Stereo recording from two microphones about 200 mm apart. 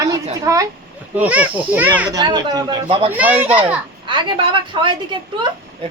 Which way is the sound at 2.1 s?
20° right (ahead or behind).